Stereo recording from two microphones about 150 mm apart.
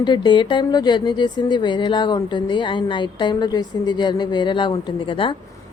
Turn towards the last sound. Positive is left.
turn(degrees=35)  # may be behind; listen again after turning